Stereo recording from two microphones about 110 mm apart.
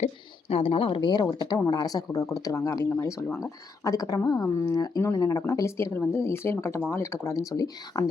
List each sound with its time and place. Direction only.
0.0 s speech: 65° left (ahead or behind); by 8.0 s 35° left (ahead or behind)